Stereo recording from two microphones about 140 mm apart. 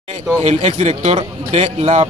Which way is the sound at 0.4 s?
50° right (ahead or behind).